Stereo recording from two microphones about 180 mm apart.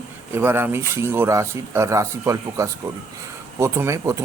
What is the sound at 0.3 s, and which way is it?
Speech, 10° right (ahead or behind).